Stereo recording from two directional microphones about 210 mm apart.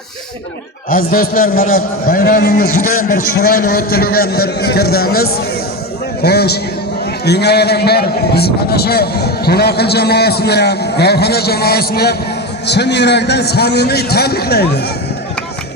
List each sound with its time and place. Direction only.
0.9 s a man's voice: 45° left (ahead or behind)